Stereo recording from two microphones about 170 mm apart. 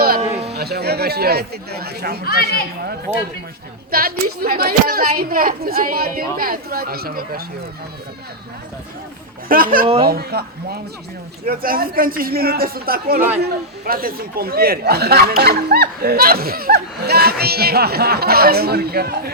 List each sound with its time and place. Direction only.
0.2 s a sound: 40° right (ahead or behind)
0.5 s speech: 70° right (ahead or behind)
3.9 s speech: 60° right (ahead or behind)
9.5 s speech: 55° right (ahead or behind)
10.1 s speech: 65° right (ahead or behind)